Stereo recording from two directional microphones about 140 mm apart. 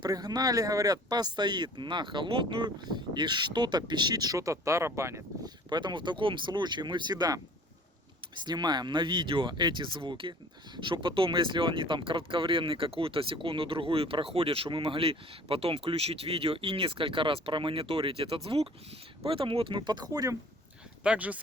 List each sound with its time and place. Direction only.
0.0 s speech: 30° right (ahead or behind)
5.6 s speech: 30° right (ahead or behind)
21.0 s speech: 10° right (ahead or behind)